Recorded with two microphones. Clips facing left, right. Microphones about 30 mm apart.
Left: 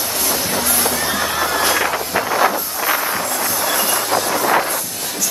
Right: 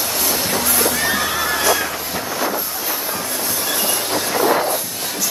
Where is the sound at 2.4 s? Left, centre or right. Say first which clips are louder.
Left 5 dB; left.